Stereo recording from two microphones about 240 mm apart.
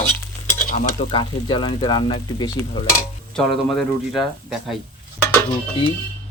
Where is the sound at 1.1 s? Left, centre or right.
Centre.